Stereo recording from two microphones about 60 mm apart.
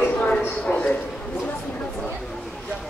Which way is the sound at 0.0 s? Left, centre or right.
Left.